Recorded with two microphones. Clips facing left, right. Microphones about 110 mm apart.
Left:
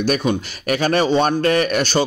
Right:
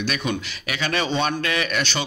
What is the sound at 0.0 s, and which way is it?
Speech, 40° left (ahead or behind).